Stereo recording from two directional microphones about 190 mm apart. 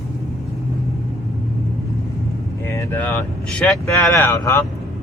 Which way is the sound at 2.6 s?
15° left (ahead or behind).